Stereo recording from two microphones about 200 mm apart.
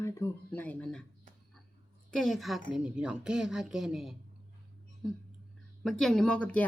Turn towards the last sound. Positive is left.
turn(degrees=5)  # may be behind; listen again after turning